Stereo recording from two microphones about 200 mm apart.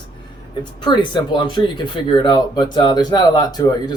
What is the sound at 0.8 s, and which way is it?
Speech, 20° left (ahead or behind).